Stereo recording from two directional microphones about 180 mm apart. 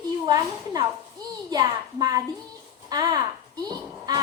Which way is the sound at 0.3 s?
20° right (ahead or behind).